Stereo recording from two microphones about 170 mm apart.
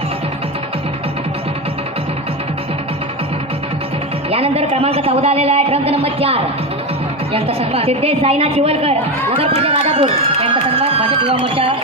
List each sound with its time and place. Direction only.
4.3 s a woman's voice: 35° right (ahead or behind)